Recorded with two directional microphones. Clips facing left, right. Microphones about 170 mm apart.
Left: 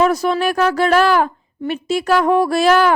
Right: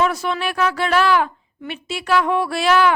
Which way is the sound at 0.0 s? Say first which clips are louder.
Left 5 dB; 40° left (ahead or behind).